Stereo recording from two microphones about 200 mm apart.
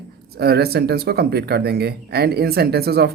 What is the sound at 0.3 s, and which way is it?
Speech, 55° right (ahead or behind).